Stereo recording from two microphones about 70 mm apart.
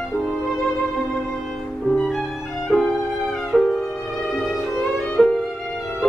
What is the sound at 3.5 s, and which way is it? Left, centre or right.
Violin, centre.